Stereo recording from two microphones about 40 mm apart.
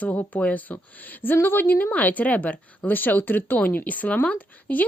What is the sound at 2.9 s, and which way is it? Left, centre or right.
Speech, left.